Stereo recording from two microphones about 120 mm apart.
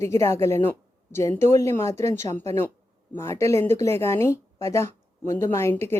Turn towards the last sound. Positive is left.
turn(degrees=20)  # may be behind; listen again after turning